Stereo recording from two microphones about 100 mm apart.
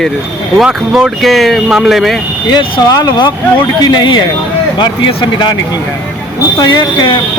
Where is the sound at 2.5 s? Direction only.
45° left (ahead or behind).